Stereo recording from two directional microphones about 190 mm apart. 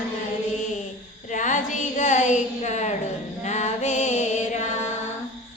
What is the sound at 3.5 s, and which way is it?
Music, 40° left (ahead or behind).